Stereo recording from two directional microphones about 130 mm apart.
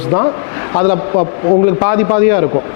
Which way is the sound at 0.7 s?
20° left (ahead or behind).